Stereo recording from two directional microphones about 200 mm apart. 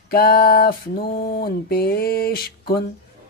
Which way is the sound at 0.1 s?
50° left (ahead or behind).